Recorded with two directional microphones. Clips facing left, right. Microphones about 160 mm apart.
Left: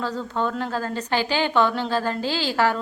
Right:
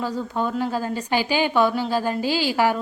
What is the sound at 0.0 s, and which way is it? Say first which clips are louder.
A woman's voice: right 1 dB; 10° right (ahead or behind).